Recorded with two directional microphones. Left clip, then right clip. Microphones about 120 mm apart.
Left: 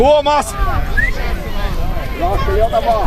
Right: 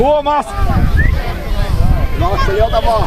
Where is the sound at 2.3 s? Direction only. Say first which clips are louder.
Right 2 dB; 35° right (ahead or behind).